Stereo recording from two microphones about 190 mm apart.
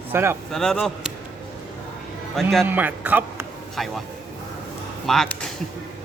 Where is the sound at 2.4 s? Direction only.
Centre (ahead or behind).